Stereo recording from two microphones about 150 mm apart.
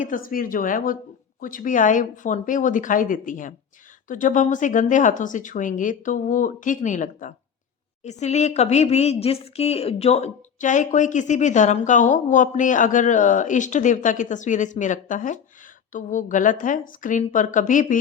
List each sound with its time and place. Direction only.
0.0 s a woman's voice: 65° left (ahead or behind)